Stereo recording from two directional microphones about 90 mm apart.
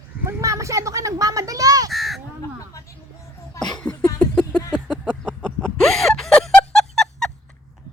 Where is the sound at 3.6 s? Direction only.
10° left (ahead or behind).